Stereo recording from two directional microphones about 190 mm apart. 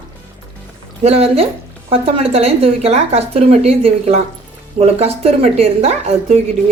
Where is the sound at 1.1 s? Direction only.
35° right (ahead or behind).